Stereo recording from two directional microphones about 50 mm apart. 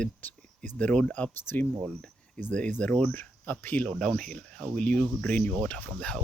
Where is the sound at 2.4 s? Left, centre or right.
Left.